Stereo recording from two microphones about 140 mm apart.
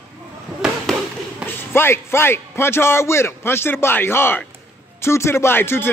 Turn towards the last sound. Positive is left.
turn(degrees=15)  # may be behind; listen again after turning